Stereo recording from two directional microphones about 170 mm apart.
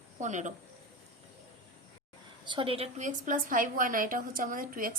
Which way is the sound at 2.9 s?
45° right (ahead or behind).